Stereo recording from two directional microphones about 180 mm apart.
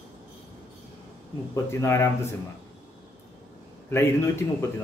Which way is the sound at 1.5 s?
15° left (ahead or behind).